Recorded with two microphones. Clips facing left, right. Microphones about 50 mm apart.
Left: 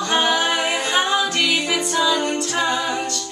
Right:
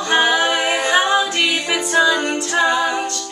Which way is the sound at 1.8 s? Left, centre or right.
Right.